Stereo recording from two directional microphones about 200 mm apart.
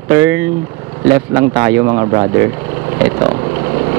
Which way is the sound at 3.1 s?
25° right (ahead or behind).